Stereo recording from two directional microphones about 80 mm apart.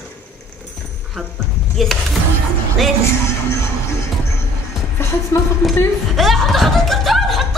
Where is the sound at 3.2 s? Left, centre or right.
Left.